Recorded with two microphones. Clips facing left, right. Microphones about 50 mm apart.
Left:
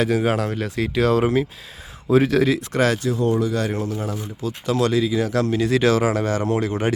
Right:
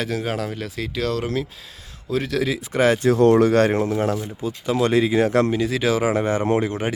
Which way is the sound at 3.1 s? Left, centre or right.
Right.